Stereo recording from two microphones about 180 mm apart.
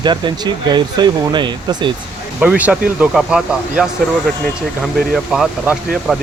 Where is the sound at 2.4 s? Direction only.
10° right (ahead or behind).